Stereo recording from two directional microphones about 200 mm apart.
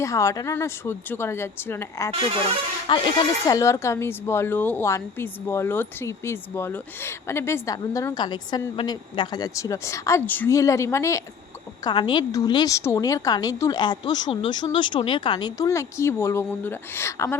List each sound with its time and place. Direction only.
0.0 s speech: 15° left (ahead or behind)